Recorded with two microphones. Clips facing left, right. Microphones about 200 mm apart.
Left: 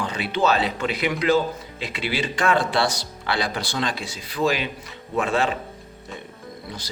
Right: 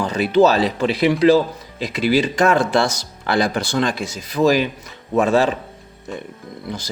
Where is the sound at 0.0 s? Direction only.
40° right (ahead or behind).